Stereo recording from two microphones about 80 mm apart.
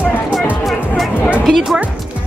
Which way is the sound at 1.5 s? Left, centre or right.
Centre.